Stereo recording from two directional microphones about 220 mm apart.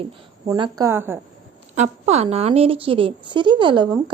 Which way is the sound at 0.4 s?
20° right (ahead or behind).